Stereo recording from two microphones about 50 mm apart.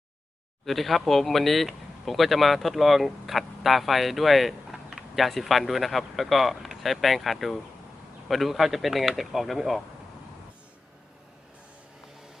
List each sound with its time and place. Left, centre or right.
0.6 s speech: centre